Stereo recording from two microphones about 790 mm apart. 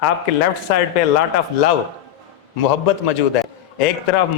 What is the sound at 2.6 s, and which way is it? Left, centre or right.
A man's voice, left.